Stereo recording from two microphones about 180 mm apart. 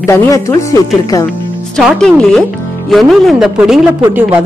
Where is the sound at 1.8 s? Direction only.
5° left (ahead or behind).